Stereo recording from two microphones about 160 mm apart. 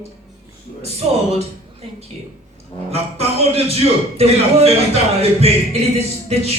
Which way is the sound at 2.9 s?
40° right (ahead or behind).